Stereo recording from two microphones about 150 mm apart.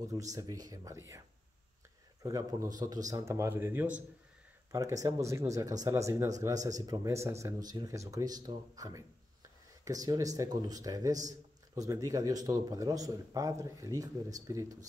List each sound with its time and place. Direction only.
0.1 s speech: 20° right (ahead or behind)
2.2 s a man's voice: 20° right (ahead or behind)